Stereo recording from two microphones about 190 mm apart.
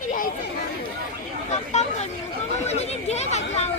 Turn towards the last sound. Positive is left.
turn(degrees=35)  # may be behind; listen again after turning